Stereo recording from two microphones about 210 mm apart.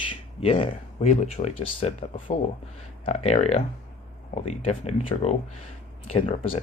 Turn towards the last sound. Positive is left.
turn(degrees=30)  # may be behind; listen again after turning